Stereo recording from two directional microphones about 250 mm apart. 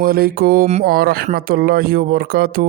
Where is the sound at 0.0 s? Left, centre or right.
Right.